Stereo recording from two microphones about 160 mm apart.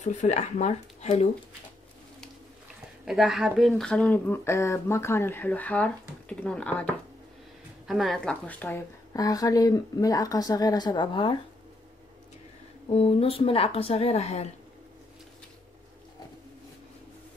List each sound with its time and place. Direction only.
0.0 s speech: 45° left (ahead or behind)
3.1 s a woman's voice: centre (ahead or behind); by 11.3 s 30° left (ahead or behind)
12.9 s a woman's voice: 35° left (ahead or behind)